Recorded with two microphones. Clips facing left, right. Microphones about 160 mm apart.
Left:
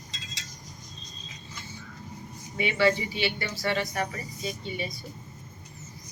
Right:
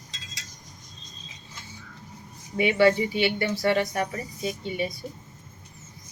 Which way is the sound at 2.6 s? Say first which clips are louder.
Right 5 dB; 55° right (ahead or behind).